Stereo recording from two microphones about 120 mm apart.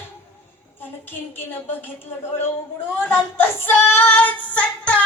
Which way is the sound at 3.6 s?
20° left (ahead or behind).